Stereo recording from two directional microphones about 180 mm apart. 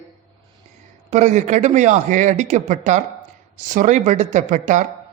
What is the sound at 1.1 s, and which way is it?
A man's voice, 40° right (ahead or behind).